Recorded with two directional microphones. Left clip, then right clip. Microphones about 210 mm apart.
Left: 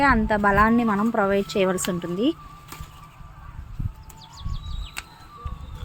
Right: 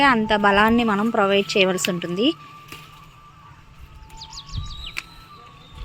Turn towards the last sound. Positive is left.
turn(degrees=50)  # may be behind; listen again after turning